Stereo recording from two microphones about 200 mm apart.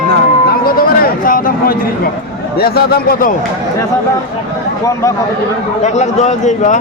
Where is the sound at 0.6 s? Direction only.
45° left (ahead or behind).